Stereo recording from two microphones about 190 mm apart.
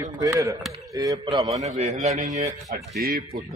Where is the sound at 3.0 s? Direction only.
50° right (ahead or behind).